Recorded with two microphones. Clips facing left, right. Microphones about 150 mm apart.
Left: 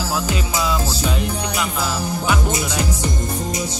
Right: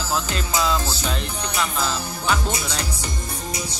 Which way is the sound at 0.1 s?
10° left (ahead or behind).